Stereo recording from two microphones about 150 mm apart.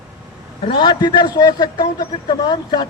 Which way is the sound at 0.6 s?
35° left (ahead or behind).